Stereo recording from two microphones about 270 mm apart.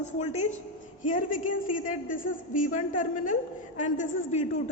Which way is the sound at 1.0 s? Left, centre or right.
Left.